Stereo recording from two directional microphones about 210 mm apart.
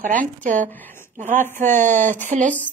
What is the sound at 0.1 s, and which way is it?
Speech, 40° right (ahead or behind).